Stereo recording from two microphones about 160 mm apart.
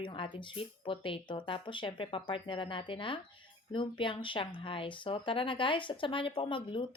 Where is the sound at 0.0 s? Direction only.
30° left (ahead or behind).